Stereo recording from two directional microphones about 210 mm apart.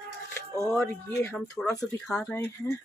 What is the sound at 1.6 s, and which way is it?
A woman's voice, centre (ahead or behind).